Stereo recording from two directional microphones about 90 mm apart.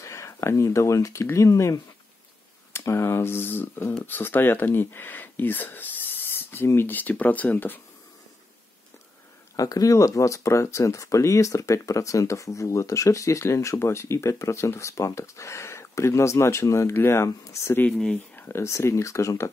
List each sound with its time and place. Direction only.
0.0 s speech: 35° left (ahead or behind)
9.6 s speech: 40° left (ahead or behind)
17.9 s speech: 10° left (ahead or behind)
18.3 s speech: 25° left (ahead or behind)